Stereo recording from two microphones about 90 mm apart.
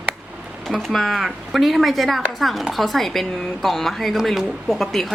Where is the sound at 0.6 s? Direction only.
Centre (ahead or behind).